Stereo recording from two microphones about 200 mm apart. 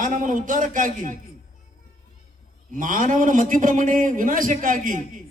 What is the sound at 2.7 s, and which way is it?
A man's voice, 40° right (ahead or behind).